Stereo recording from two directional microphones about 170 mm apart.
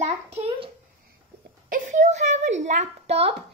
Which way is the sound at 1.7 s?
45° right (ahead or behind).